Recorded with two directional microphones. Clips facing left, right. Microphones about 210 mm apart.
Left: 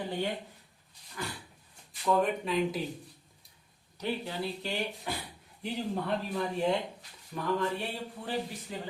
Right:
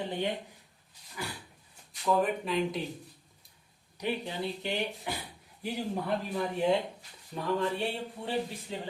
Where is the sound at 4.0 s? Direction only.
15° right (ahead or behind).